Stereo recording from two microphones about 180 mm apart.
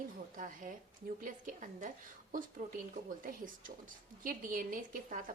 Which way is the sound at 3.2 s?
50° right (ahead or behind).